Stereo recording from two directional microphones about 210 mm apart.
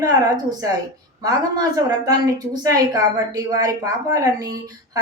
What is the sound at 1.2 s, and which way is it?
A woman's voice, 15° right (ahead or behind).